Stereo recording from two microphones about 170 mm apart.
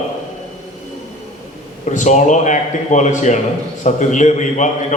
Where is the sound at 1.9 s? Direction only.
45° left (ahead or behind).